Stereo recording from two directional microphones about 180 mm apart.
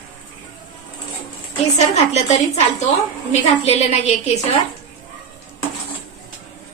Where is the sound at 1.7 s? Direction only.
40° left (ahead or behind).